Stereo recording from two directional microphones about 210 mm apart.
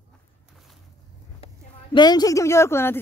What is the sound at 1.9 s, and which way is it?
Speech, 20° left (ahead or behind).